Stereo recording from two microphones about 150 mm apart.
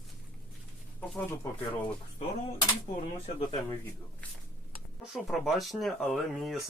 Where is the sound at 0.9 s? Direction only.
10° left (ahead or behind).